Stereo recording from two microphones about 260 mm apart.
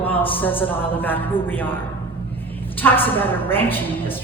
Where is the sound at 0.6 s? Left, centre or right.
Centre.